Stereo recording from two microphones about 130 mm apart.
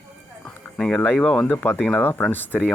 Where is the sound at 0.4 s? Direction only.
5° left (ahead or behind).